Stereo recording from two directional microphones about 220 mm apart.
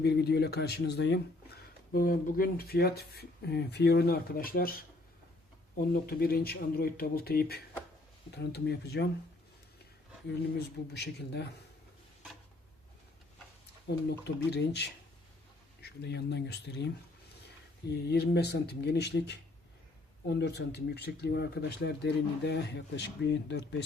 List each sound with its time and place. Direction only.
0.0 s speech: 50° left (ahead or behind)
1.9 s speech: 40° left (ahead or behind)
5.9 s speech: 45° left (ahead or behind)
10.9 s speech: 50° left (ahead or behind)
13.8 s speech: 50° left (ahead or behind)
17.9 s speech: 45° left (ahead or behind)